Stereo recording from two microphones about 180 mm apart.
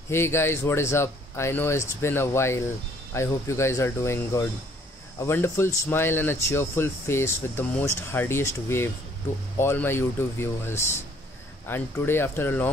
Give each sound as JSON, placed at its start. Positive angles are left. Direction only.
{"t": 0.1, "sound": "speech", "side_deg": 15}